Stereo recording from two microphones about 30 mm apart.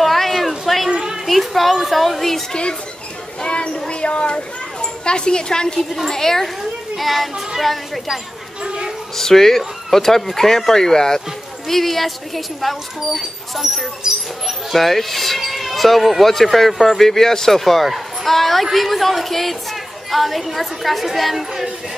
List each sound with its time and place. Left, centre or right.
0.0 s a sound: centre
0.8 s children playing: right
1.2 s a child's voice: centre
3.3 s child singing: left
3.9 s speech: left
5.8 s speech: centre
7.0 s speech: centre
8.6 s a sound: right
9.1 s speech: centre
11.1 s speech: centre